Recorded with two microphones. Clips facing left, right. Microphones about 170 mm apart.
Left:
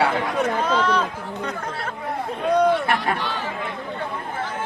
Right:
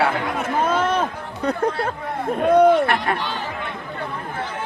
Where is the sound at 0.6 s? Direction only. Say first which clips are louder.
Right 5 dB; 50° right (ahead or behind).